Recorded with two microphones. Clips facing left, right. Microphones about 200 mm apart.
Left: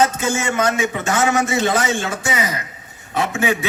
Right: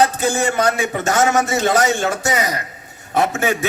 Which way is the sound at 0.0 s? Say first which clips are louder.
Right 2 dB; 35° right (ahead or behind).